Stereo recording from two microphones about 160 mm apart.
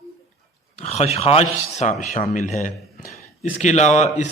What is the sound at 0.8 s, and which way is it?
A man's voice, 40° left (ahead or behind).